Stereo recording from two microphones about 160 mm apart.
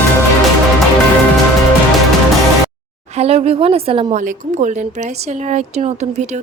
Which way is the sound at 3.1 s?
40° right (ahead or behind).